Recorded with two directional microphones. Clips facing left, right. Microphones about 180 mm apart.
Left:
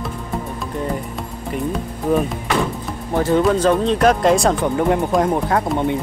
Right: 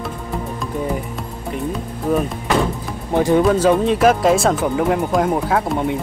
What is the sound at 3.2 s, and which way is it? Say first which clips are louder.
Speech: right 1 dB; 15° right (ahead or behind).